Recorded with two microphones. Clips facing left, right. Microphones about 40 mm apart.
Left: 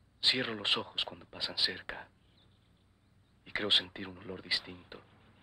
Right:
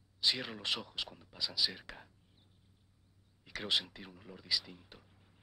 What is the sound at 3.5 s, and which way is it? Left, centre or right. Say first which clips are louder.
Speech: left 5 dB; left.